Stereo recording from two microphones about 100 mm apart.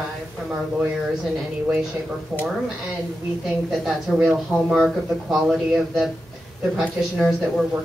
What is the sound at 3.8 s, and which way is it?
Speech, centre (ahead or behind).